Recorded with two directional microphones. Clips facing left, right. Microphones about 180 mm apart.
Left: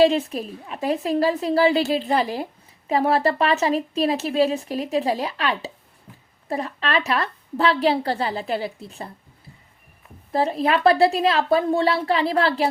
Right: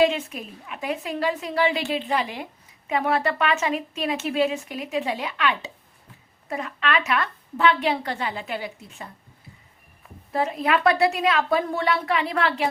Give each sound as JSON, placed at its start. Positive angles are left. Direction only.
{"t": 0.0, "sound": "a woman's voice", "side_deg": 35}
{"t": 10.3, "sound": "a woman's voice", "side_deg": 30}